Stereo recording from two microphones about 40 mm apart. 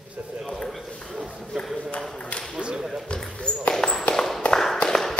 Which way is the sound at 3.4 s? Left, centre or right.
Left.